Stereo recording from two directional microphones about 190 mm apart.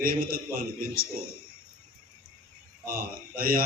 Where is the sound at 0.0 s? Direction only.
50° right (ahead or behind).